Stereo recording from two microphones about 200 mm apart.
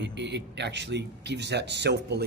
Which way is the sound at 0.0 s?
60° right (ahead or behind).